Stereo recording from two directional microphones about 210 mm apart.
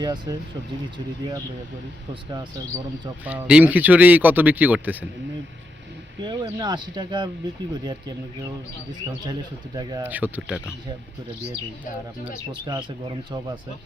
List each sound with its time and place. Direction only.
0.0 s speech: 20° right (ahead or behind)
3.2 s a man's voice: 5° right (ahead or behind)
6.2 s speech: 20° right (ahead or behind)
9.7 s a man's voice: 15° right (ahead or behind)
12.6 s speech: 20° right (ahead or behind)